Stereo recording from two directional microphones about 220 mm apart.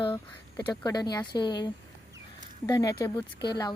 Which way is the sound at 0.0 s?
20° left (ahead or behind).